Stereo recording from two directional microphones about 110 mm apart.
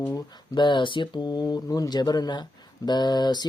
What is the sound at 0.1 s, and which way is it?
Speech, 35° left (ahead or behind).